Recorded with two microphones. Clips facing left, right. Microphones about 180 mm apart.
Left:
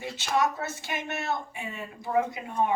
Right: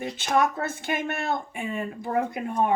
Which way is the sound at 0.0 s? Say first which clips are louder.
Right 3 dB; 55° right (ahead or behind).